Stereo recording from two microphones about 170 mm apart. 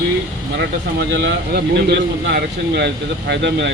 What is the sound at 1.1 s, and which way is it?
Speech, 85° right.